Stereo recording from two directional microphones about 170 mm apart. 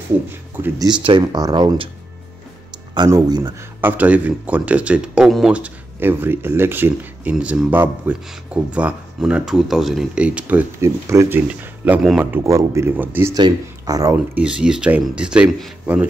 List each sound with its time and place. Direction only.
0.6 s speech: 10° right (ahead or behind)
1.0 s speech: 25° right (ahead or behind)
2.9 s speech: 20° right (ahead or behind)
3.8 s speech: 10° right (ahead or behind)
12.3 s speech: 15° right (ahead or behind)
13.3 s speech: 20° right (ahead or behind)
14.1 s speech: 5° right (ahead or behind)